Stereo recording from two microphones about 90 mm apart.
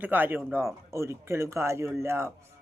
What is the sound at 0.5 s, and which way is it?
A man's voice, 30° right (ahead or behind).